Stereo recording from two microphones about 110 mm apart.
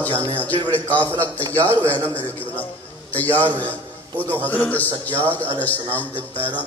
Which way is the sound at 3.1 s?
15° left (ahead or behind).